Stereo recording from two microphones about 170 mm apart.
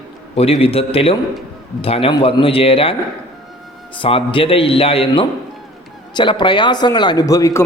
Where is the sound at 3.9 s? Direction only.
30° left (ahead or behind).